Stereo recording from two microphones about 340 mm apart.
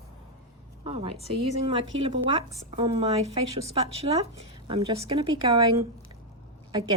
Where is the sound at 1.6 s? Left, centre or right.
Centre.